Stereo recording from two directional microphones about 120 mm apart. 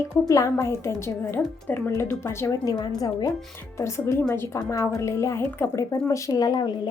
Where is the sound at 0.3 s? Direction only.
25° left (ahead or behind).